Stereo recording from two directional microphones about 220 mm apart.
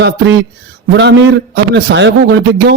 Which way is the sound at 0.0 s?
50° right (ahead or behind).